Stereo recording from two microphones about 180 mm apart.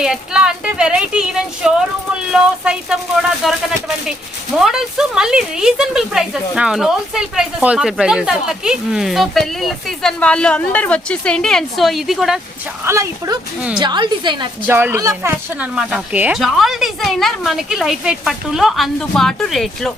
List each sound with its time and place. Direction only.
0.0 s speech: 5° right (ahead or behind)
12.8 s a woman's voice: 15° right (ahead or behind)
14.7 s speech: 10° right (ahead or behind)